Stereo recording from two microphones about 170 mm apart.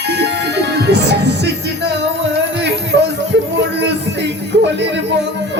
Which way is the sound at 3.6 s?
90° right.